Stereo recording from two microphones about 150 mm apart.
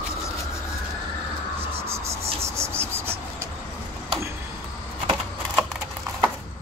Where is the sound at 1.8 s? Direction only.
20° right (ahead or behind).